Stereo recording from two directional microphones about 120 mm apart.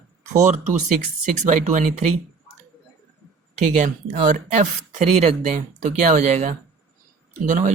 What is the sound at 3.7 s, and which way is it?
Speech, 90° right.